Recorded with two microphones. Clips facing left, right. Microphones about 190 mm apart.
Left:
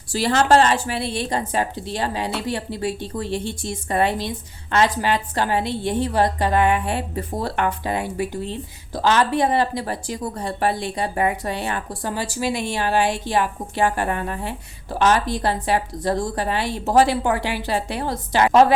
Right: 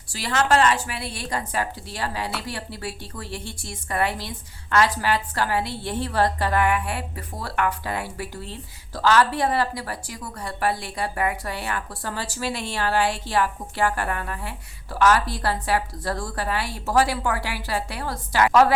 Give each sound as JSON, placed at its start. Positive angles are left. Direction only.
{"t": 0.1, "sound": "a woman's voice", "side_deg": 30}